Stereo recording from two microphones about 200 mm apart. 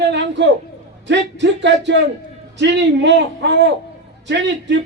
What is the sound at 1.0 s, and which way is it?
A man's voice, 65° right (ahead or behind).